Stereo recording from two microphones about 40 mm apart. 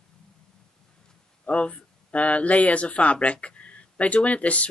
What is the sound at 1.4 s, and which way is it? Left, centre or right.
Speech, left.